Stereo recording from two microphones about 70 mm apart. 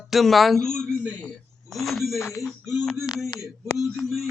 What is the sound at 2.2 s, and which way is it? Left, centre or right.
Speech, left.